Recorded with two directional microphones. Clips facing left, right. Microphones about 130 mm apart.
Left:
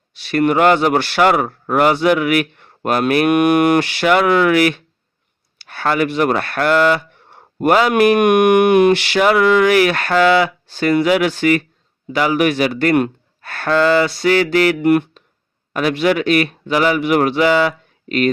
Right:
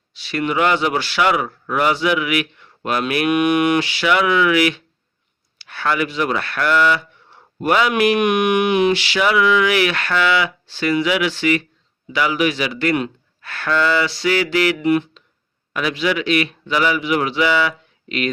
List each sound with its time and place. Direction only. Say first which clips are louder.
0.2 s speech: left 5 dB; 50° left (ahead or behind)